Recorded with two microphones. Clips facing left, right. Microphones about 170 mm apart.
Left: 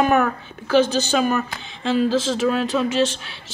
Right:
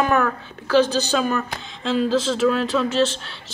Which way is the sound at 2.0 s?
5° left (ahead or behind).